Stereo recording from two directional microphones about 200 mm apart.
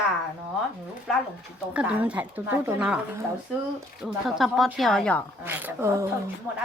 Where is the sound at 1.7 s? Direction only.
5° right (ahead or behind).